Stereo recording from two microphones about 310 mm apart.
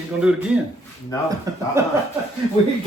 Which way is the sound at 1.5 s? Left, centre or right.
Centre.